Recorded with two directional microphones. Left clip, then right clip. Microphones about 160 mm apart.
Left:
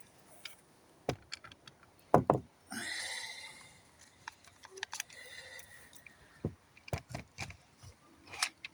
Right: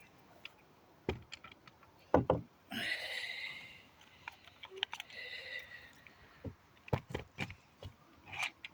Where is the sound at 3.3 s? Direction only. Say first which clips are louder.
Right 5 dB; 25° left (ahead or behind).